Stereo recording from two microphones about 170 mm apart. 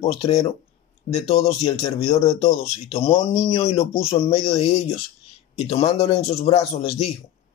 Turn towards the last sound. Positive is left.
turn(degrees=40)  # may be behind; listen again after turning